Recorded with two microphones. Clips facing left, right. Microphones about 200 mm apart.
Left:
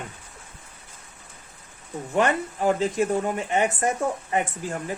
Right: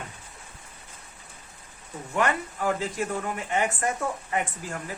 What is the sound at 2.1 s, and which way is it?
Speech, 25° left (ahead or behind).